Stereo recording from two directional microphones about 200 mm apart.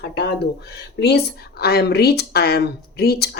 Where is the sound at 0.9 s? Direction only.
55° left (ahead or behind).